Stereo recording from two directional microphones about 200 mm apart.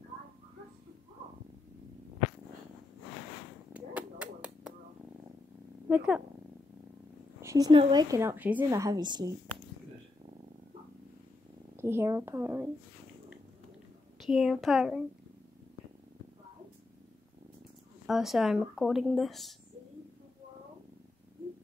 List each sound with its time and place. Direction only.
3.7 s a sound: 5° right (ahead or behind)
5.9 s speech: 10° right (ahead or behind)
7.4 s a woman's voice: 20° right (ahead or behind)
11.7 s a woman's voice: 10° right (ahead or behind)
14.2 s speech: centre (ahead or behind)
18.0 s speech: centre (ahead or behind)